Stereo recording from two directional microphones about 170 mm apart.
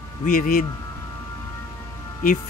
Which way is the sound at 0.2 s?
55° left (ahead or behind).